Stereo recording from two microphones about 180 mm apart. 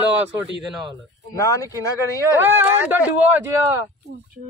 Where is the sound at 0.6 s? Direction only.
Centre (ahead or behind).